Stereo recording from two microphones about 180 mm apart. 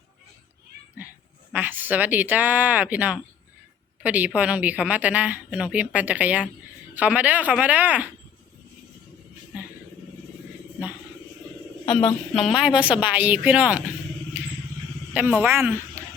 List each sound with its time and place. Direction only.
1.5 s a woman's voice: 10° right (ahead or behind)
11.9 s speech: 30° left (ahead or behind)
12.3 s a woman's voice: centre (ahead or behind)
15.1 s a woman's voice: 10° right (ahead or behind)